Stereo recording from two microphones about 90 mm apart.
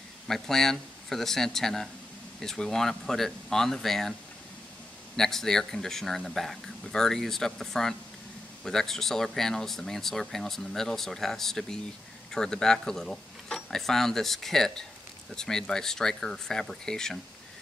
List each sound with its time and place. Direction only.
0.3 s speech: 5° left (ahead or behind)
5.1 s speech: 5° left (ahead or behind)